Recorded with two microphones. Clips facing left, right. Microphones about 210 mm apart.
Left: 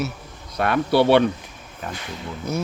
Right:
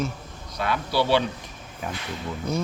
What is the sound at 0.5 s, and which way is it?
Speech, 60° left (ahead or behind).